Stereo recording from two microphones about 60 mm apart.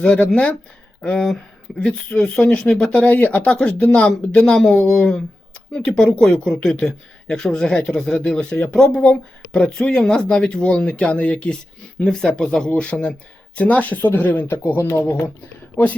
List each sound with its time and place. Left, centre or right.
0.0 s speech: centre; by 3.4 s left
3.4 s speech: centre
4.4 s speech: centre; by 15.3 s left